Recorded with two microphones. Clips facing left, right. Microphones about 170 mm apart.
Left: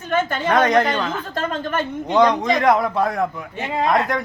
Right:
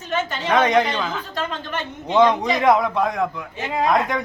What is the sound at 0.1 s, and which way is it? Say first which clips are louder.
Speech: left 4 dB; 50° left (ahead or behind).